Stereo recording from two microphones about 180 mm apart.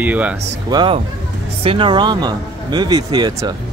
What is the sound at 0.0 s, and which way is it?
Speech, 10° right (ahead or behind).